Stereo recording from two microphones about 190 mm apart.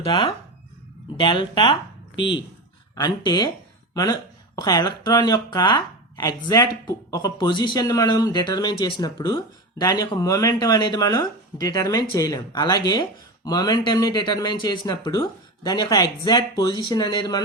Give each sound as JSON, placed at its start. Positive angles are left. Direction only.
{"t": 0.0, "sound": "speech", "side_deg": 30}
{"t": 2.9, "sound": "speech", "side_deg": 20}